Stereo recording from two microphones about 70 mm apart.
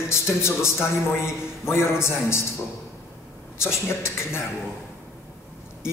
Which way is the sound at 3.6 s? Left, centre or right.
Left.